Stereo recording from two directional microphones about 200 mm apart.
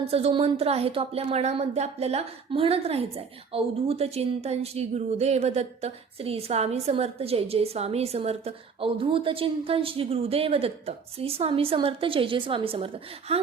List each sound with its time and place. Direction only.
0.0 s speech: 30° right (ahead or behind)